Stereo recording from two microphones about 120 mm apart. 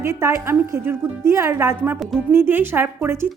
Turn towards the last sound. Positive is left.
turn(degrees=-20)  # may be behind; listen again after turning